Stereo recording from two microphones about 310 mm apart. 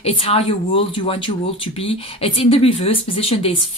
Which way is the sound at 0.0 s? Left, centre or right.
Centre.